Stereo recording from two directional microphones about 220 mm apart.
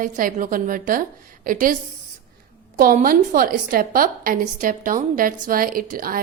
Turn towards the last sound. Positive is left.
turn(degrees=-40)  # may be behind; listen again after turning